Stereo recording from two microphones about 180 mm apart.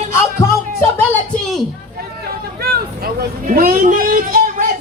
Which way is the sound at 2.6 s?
55° right (ahead or behind).